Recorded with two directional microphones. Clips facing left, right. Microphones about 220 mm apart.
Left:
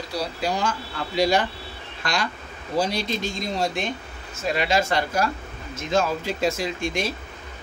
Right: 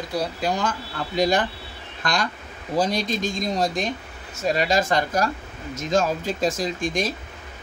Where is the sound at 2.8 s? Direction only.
45° right (ahead or behind).